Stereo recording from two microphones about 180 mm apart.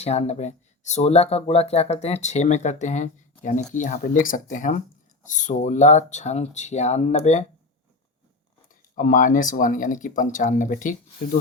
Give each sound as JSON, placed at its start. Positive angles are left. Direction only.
{"t": 0.0, "sound": "speech", "side_deg": 35}
{"t": 9.0, "sound": "speech", "side_deg": 45}